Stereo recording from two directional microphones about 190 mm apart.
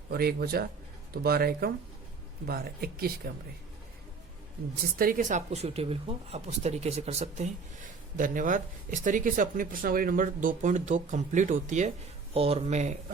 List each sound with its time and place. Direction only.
0.1 s speech: 55° right (ahead or behind)
4.9 s speech: 45° right (ahead or behind)